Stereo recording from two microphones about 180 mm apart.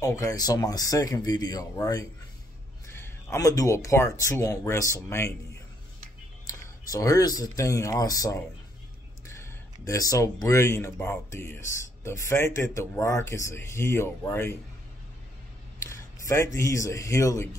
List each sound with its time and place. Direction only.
0.0 s speech: 20° left (ahead or behind)
6.9 s speech: 20° left (ahead or behind)
16.3 s speech: 15° left (ahead or behind)